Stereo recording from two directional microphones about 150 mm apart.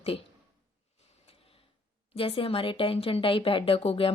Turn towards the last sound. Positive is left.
turn(degrees=40)  # may be behind; listen again after turning